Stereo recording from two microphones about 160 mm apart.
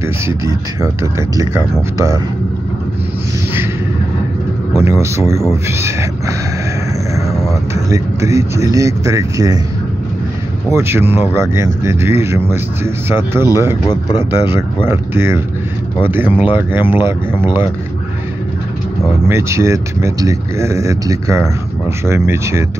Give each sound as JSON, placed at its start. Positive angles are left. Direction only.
{"t": 0.0, "sound": "speech", "side_deg": -20}
{"t": 4.7, "sound": "speech", "side_deg": -15}
{"t": 7.9, "sound": "speech", "side_deg": -20}
{"t": 10.7, "sound": "speech", "side_deg": -15}
{"t": 14.9, "sound": "speech", "side_deg": -15}
{"t": 16.3, "sound": "speech", "side_deg": 30}
{"t": 16.7, "sound": "speech", "side_deg": -15}
{"t": 19.2, "sound": "speech", "side_deg": -15}